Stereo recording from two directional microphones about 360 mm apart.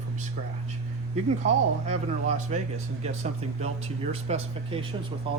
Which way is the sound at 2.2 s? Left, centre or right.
Centre.